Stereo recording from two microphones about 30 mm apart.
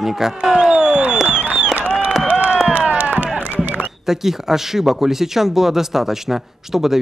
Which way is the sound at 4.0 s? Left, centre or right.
Centre.